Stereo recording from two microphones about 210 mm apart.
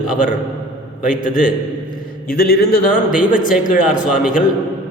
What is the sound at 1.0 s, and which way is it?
A man's voice, 40° left (ahead or behind).